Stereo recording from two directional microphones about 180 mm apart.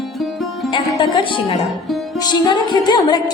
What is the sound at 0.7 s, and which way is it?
A woman's voice, 25° left (ahead or behind).